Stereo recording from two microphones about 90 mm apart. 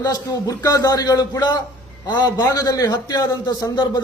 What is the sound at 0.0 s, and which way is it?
A man's voice, 45° left (ahead or behind).